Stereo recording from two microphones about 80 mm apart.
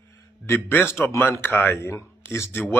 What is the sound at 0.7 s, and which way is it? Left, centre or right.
Speech, left.